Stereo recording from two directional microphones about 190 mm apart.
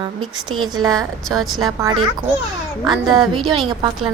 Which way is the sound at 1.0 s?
Centre (ahead or behind).